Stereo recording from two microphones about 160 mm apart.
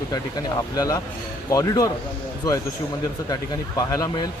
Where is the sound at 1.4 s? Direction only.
25° left (ahead or behind).